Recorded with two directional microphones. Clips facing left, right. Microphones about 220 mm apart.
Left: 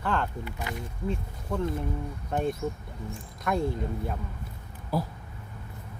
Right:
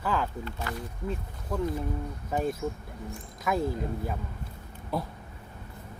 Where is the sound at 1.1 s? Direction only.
5° right (ahead or behind).